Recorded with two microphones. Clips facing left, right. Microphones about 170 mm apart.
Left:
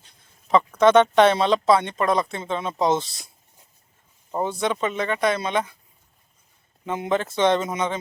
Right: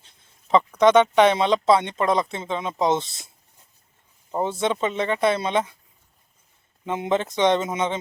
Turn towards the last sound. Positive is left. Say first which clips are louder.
# even
turn(degrees=-25)  # may be behind; listen again after turning